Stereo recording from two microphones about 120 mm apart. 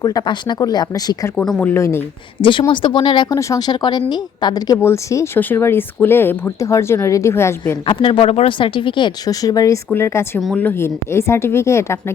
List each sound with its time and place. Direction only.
0.0 s speech: 35° left (ahead or behind)
1.5 s speech: 10° left (ahead or behind)
2.4 s speech: 45° left (ahead or behind); by 7.5 s 20° left (ahead or behind)
7.9 s speech: 45° left (ahead or behind); by 10.4 s 20° left (ahead or behind)
10.4 s speech: 10° left (ahead or behind)